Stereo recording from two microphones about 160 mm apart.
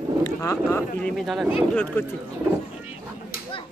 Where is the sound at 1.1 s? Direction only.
Centre (ahead or behind).